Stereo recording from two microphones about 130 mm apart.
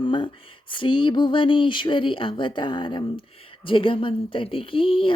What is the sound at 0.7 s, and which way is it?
Speech, 40° left (ahead or behind).